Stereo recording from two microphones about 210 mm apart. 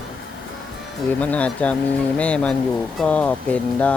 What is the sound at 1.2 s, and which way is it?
Speech, 5° left (ahead or behind).